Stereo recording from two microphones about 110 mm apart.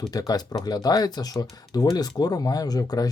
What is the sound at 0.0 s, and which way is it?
Speech, 35° left (ahead or behind).